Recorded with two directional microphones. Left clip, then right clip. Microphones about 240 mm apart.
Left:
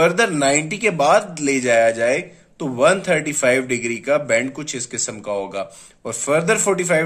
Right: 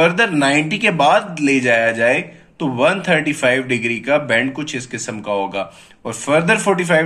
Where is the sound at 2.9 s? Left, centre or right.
Left.